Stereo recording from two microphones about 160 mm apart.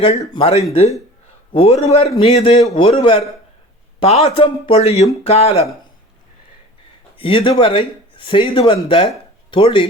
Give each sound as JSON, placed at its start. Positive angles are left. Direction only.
{"t": 0.3, "sound": "speech", "side_deg": 35}
{"t": 7.2, "sound": "speech", "side_deg": 30}